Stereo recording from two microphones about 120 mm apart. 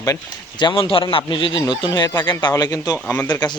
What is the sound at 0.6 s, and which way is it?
Speech, 45° left (ahead or behind).